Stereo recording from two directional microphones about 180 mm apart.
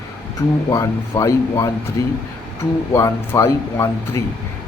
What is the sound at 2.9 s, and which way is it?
A man's voice, 15° left (ahead or behind).